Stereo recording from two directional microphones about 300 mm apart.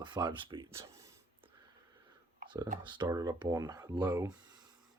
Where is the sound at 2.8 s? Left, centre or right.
Centre.